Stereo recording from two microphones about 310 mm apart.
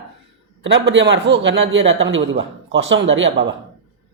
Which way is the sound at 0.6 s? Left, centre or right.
Right.